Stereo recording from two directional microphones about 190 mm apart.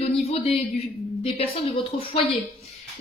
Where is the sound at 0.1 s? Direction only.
30° left (ahead or behind).